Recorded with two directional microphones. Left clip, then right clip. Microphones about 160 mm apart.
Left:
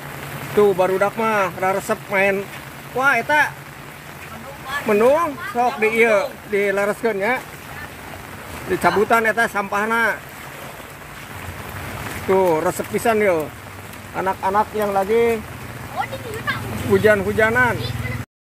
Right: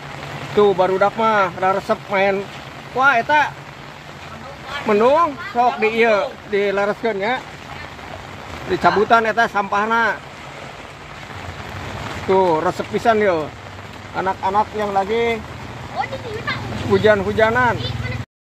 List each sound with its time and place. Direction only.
0.6 s speech: 5° left (ahead or behind)
4.8 s speech: 5° left (ahead or behind)
8.8 s speech: 10° left (ahead or behind)
12.3 s speech: 5° left (ahead or behind)
14.4 s speech: 25° left (ahead or behind)
16.4 s speech: 10° left (ahead or behind)